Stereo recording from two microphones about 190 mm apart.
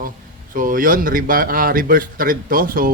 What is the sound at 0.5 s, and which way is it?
Speech, 45° right (ahead or behind).